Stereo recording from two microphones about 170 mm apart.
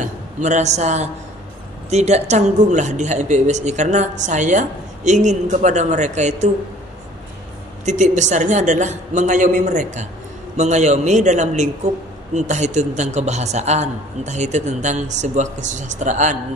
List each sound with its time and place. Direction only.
0.0 s a man's voice: 45° right (ahead or behind)
7.8 s a woman's voice: 45° right (ahead or behind)